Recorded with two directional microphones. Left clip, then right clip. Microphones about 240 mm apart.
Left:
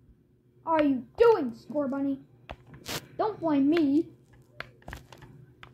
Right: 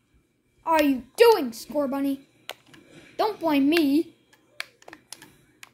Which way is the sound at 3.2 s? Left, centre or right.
Right.